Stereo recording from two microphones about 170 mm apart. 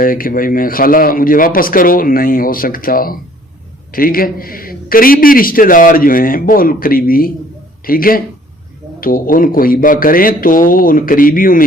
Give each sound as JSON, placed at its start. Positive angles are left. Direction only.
{"t": 0.0, "sound": "a man's voice", "side_deg": 55}